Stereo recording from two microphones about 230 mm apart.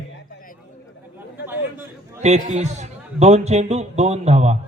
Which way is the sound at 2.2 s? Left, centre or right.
Right.